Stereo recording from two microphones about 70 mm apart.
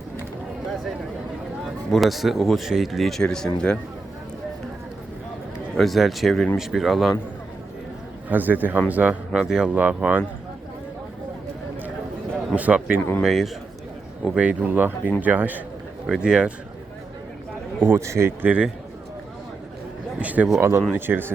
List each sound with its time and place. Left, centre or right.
1.6 s speech: centre
5.7 s speech: centre
8.3 s speech: right
9.3 s speech: centre
12.5 s speech: right
13.0 s speech: left
13.2 s speech: centre
14.3 s speech: right
16.0 s speech: centre
17.8 s a man's voice: right
18.4 s speech: centre
20.1 s speech: right
20.6 s a man's voice: right